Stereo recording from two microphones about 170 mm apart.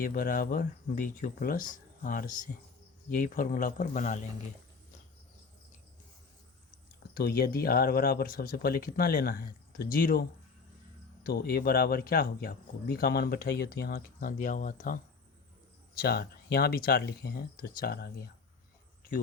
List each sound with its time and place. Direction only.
0.0 s speech: 60° left (ahead or behind)
7.1 s speech: 65° left (ahead or behind)
11.3 s speech: 65° left (ahead or behind)
16.0 s speech: 65° left (ahead or behind)